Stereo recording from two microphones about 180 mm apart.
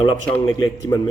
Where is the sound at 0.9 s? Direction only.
20° left (ahead or behind).